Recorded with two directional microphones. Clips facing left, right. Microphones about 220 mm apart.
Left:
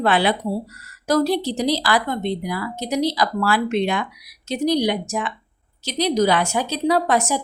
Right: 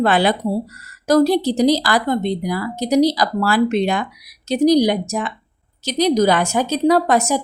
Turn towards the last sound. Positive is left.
turn(degrees=-45)  # may be behind; listen again after turning